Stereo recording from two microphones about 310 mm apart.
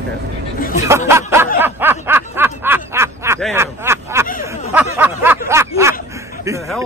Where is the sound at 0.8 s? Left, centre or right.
Centre.